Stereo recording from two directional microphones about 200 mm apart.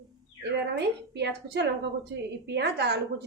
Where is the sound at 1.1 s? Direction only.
55° right (ahead or behind).